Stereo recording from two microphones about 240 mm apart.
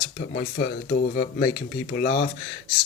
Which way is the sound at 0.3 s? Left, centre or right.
Left.